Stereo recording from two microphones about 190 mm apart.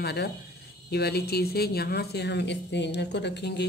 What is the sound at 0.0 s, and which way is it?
Speech, 55° left (ahead or behind).